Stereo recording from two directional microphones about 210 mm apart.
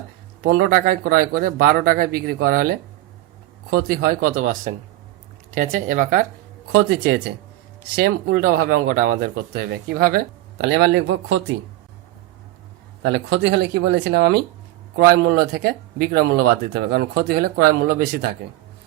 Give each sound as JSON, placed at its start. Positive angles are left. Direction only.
{"t": 0.4, "sound": "speech", "side_deg": -45}
{"t": 6.8, "sound": "speech", "side_deg": -50}
{"t": 13.0, "sound": "speech", "side_deg": -55}